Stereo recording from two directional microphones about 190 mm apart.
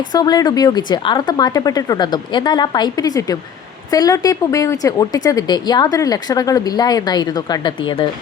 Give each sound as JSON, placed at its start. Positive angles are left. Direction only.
{"t": 0.1, "sound": "a woman's voice", "side_deg": 20}